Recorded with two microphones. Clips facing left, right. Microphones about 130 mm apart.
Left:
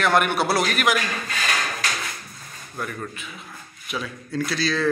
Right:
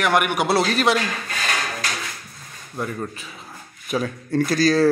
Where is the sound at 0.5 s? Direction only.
30° right (ahead or behind).